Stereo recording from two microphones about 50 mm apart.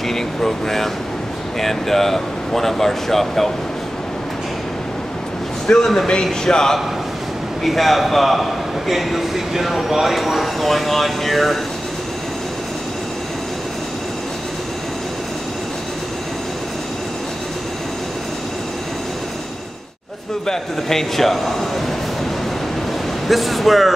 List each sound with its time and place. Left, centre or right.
0.1 s speech: centre
5.7 s speech: centre
7.6 s speech: centre
20.4 s speech: centre
23.2 s speech: centre